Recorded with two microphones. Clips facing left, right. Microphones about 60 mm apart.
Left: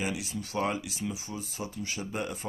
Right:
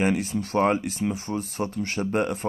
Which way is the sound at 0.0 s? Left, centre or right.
Right.